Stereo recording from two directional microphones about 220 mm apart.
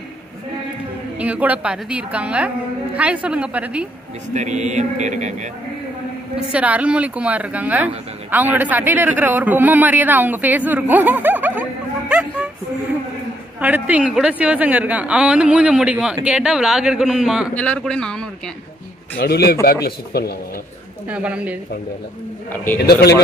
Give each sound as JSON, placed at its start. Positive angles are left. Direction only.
{"t": 1.2, "sound": "a woman's voice", "side_deg": -5}
{"t": 4.3, "sound": "a man's voice", "side_deg": -30}
{"t": 6.5, "sound": "a woman's voice", "side_deg": -5}
{"t": 12.1, "sound": "a sound", "side_deg": -5}
{"t": 13.6, "sound": "a woman's voice", "side_deg": -5}
{"t": 19.1, "sound": "speech", "side_deg": 45}
{"t": 21.1, "sound": "a woman's voice", "side_deg": -5}
{"t": 22.8, "sound": "speech", "side_deg": 45}